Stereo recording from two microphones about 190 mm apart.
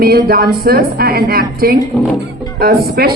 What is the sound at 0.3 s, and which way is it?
A woman's voice, 50° right (ahead or behind).